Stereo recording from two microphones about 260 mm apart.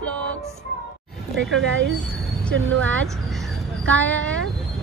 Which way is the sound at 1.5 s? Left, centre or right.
Right.